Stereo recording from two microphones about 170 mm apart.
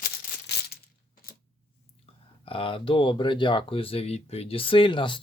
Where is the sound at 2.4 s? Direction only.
30° left (ahead or behind).